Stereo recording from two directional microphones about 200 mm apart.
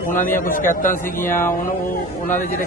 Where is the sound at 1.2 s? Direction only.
10° left (ahead or behind).